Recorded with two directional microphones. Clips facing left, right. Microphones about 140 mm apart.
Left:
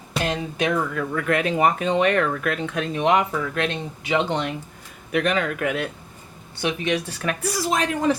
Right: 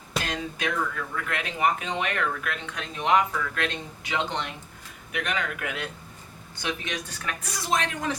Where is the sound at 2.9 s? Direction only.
20° left (ahead or behind).